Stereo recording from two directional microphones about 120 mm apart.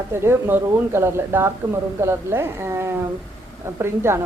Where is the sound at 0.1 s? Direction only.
20° right (ahead or behind).